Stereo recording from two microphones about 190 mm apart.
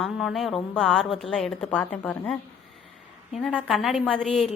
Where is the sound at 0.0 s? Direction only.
Centre (ahead or behind).